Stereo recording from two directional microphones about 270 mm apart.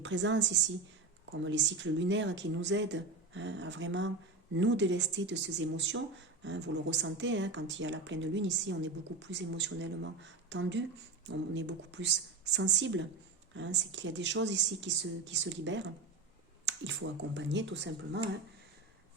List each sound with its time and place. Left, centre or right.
0.0 s a woman's voice: right